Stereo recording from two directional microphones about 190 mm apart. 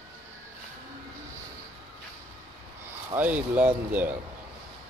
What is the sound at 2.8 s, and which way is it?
Speech, 10° right (ahead or behind).